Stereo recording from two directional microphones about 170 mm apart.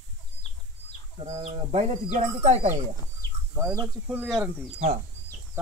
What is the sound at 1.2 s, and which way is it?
Speech, 40° right (ahead or behind).